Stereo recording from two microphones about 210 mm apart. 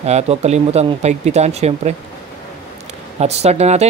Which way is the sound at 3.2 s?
30° right (ahead or behind).